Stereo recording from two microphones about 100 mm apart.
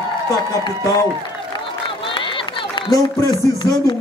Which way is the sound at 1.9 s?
60° left (ahead or behind).